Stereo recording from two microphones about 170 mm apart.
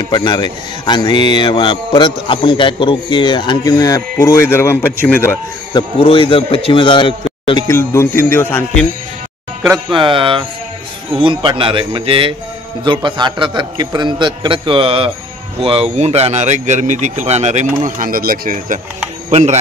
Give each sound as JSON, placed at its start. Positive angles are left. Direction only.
{"t": 0.0, "sound": "a man's voice", "side_deg": 25}
{"t": 7.6, "sound": "speech", "side_deg": 15}
{"t": 9.6, "sound": "speech", "side_deg": -5}
{"t": 9.9, "sound": "a man's voice", "side_deg": -30}
{"t": 19.3, "sound": "speech", "side_deg": -40}